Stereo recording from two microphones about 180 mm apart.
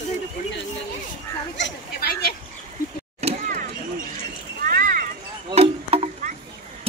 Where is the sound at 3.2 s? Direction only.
35° right (ahead or behind).